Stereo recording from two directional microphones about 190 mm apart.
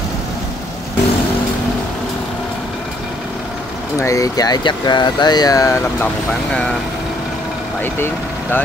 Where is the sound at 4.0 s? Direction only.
15° left (ahead or behind).